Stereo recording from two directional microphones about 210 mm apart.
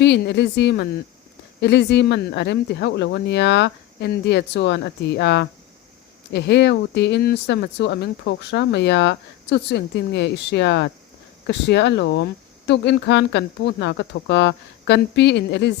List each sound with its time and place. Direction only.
0.0 s speech: 55° left (ahead or behind)